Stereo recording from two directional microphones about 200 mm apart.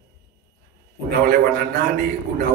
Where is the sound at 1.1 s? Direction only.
50° right (ahead or behind).